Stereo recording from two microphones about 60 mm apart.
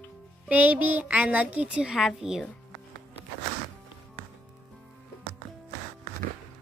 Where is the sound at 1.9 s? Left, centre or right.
Centre.